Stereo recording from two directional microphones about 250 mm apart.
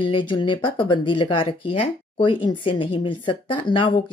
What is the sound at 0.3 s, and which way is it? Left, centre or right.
Speech, centre.